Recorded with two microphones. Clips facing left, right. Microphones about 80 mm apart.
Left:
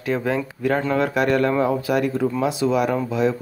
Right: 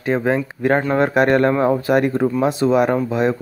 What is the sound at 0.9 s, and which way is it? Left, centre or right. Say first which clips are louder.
Speech: right 5 dB; right.